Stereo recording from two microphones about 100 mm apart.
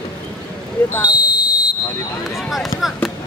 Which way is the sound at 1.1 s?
15° right (ahead or behind).